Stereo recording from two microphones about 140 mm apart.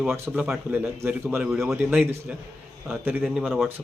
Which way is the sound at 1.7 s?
15° right (ahead or behind).